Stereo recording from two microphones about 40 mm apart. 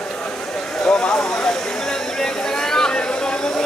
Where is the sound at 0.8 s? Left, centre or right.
Left.